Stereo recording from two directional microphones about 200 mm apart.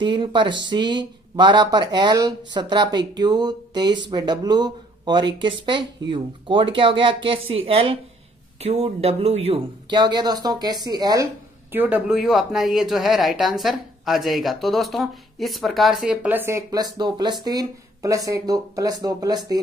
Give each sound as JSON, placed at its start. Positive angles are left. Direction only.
{"t": 0.0, "sound": "speech", "side_deg": -25}